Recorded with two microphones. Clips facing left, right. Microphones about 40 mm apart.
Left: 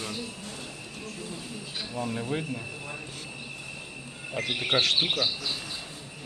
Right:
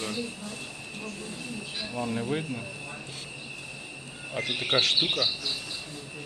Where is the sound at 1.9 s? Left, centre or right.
Right.